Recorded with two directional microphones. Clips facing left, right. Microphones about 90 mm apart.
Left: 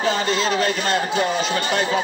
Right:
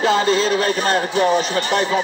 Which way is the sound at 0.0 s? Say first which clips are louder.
Right 4 dB; 40° right (ahead or behind).